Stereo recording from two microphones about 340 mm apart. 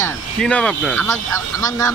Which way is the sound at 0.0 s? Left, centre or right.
Centre.